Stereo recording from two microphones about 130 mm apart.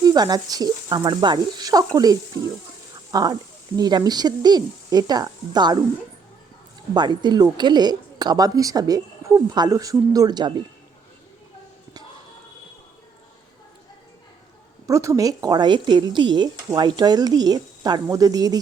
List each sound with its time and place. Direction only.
0.0 s a woman's voice: 30° right (ahead or behind)
6.9 s a woman's voice: 35° right (ahead or behind)
14.8 s a woman's voice: 25° right (ahead or behind)